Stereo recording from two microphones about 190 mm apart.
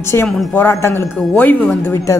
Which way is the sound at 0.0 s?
15° left (ahead or behind).